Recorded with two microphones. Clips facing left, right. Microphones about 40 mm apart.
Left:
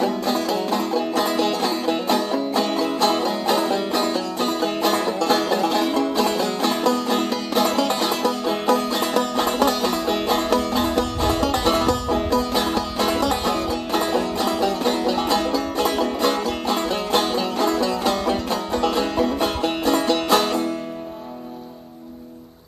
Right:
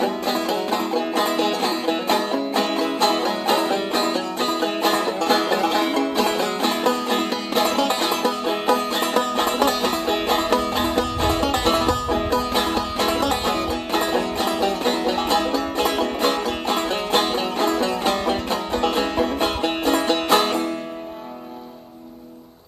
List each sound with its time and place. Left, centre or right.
0.0 s music: right